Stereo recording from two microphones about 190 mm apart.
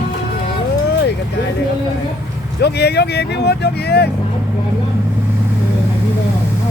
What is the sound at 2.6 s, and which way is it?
Speech, 60° left (ahead or behind).